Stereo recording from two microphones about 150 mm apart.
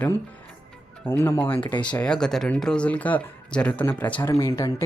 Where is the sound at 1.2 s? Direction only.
15° left (ahead or behind).